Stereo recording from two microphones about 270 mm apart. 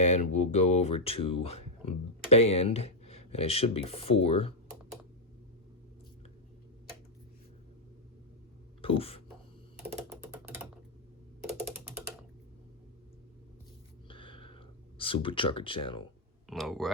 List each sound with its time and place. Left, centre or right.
0.0 s speech: left
8.8 s speech: left
10.2 s typing: centre
14.1 s a sound: centre
16.5 s speech: centre